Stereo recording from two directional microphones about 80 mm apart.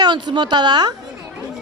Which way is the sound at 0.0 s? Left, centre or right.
Right.